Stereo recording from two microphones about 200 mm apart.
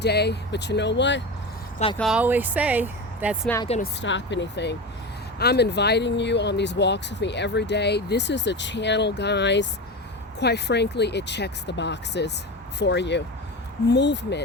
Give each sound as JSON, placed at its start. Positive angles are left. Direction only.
{"t": 0.0, "sound": "speech", "side_deg": 55}
{"t": 2.0, "sound": "speech", "side_deg": -5}
{"t": 4.0, "sound": "speech", "side_deg": 65}